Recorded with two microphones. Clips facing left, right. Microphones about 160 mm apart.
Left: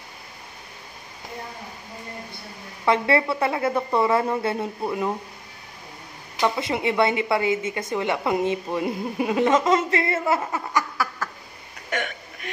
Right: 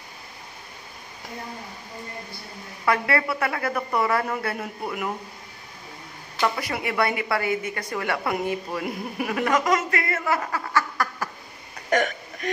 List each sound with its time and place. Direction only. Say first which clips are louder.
2.8 s a woman's voice: left 3 dB; 25° left (ahead or behind)
6.3 s a woman's voice: left 2 dB; 20° left (ahead or behind)
11.9 s hiccup: right 6 dB; 40° right (ahead or behind)